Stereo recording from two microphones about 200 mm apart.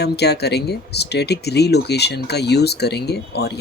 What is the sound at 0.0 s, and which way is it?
Speech, 55° left (ahead or behind).